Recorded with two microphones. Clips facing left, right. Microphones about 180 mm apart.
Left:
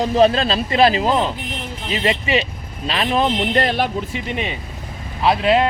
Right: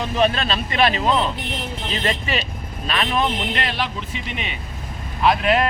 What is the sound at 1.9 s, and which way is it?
Speech, 20° left (ahead or behind).